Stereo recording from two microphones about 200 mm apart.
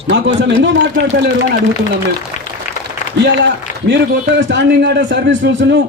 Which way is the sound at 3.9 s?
60° right (ahead or behind).